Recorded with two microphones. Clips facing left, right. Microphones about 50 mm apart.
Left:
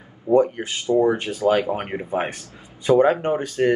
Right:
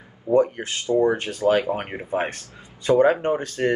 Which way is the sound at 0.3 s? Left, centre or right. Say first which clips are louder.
Left 2 dB; centre.